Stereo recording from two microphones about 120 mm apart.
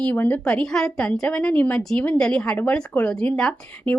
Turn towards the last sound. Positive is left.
turn(degrees=10)  # may be behind; listen again after turning